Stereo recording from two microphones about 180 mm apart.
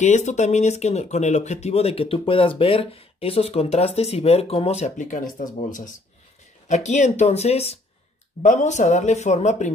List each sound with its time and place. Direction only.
0.0 s speech: 40° left (ahead or behind)